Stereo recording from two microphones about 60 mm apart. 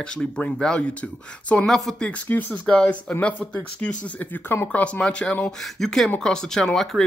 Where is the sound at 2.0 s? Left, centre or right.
Left.